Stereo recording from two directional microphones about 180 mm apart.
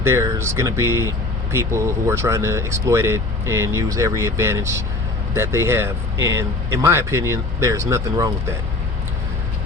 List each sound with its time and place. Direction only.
0.0 s speech: 15° right (ahead or behind)